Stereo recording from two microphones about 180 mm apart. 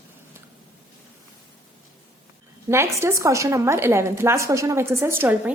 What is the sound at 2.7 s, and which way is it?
A woman's voice, 15° right (ahead or behind).